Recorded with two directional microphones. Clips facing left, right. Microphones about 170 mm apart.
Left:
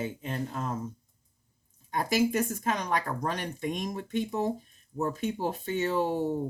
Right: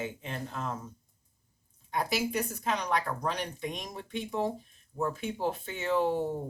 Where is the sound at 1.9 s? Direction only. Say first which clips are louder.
Left 4 dB; 45° left (ahead or behind).